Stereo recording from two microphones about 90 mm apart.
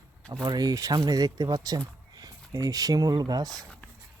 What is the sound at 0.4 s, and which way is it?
Speech, 45° right (ahead or behind).